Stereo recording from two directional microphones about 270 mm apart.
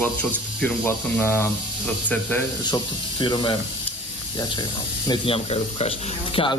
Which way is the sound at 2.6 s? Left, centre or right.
Centre.